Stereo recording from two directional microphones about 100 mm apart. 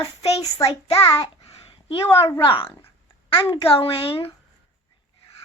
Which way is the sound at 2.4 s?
60° left (ahead or behind).